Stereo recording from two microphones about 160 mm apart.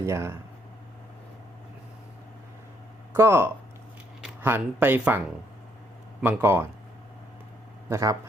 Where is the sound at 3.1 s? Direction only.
15° right (ahead or behind).